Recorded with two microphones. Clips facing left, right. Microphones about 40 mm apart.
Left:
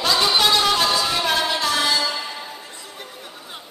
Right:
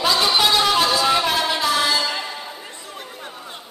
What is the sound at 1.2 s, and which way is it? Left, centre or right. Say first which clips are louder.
Music: right 1 dB; centre.